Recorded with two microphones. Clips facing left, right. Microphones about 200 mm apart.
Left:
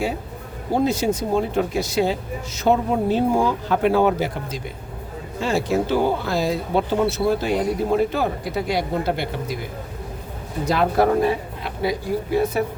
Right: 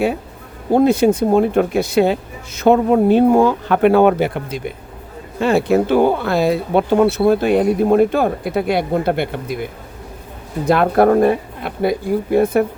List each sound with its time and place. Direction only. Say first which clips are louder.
0.7 s speech: right 8 dB; 55° right (ahead or behind)
10.7 s speech: right 6 dB; 55° right (ahead or behind)